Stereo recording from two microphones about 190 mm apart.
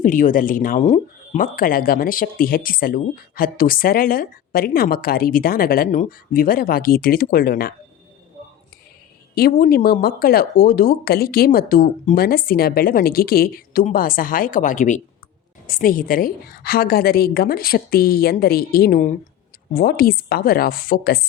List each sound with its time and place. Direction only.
0.0 s speech: 45° left (ahead or behind)
9.3 s speech: 50° left (ahead or behind)